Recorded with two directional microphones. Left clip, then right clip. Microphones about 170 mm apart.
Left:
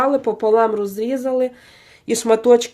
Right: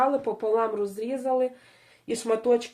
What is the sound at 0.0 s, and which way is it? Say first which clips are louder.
Speech: left 7 dB; 30° left (ahead or behind).